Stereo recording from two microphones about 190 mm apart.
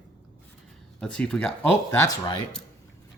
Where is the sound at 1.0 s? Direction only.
5° left (ahead or behind).